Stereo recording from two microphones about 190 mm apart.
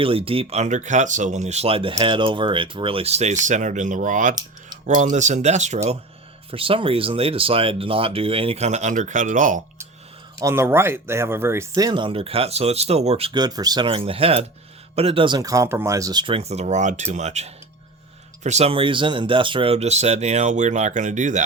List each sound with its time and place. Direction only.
0.0 s speech: 30° right (ahead or behind)
10.4 s speech: 15° right (ahead or behind); by 21.4 s 40° right (ahead or behind)